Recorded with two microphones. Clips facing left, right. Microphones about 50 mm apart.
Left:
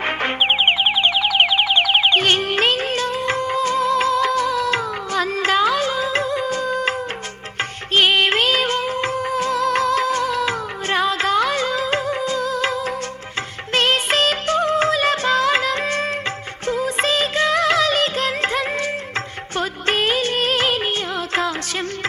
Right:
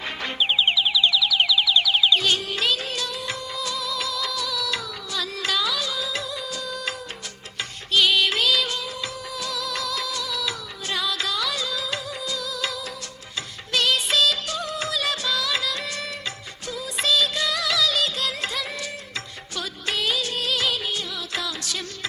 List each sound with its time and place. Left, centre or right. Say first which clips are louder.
0.0 s music: left 7 dB; left
7.9 s music: left 4 dB; left
16.6 s music of bollywood: left 6 dB; left
19.5 s music: left 8 dB; left